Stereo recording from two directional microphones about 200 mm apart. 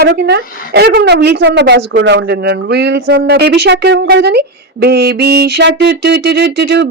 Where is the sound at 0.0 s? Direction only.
55° right (ahead or behind).